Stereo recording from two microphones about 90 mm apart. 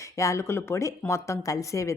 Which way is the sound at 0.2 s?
35° left (ahead or behind).